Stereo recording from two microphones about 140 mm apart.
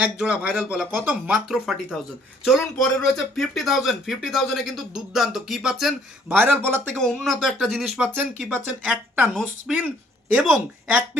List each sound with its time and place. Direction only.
0.0 s speech: 10° right (ahead or behind)
6.3 s speech: 15° right (ahead or behind)
6.9 s speech: 5° left (ahead or behind)